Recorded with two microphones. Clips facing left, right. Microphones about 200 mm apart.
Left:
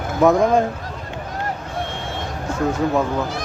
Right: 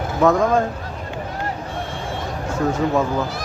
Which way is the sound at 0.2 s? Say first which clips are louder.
Left 1 dB; 15° left (ahead or behind).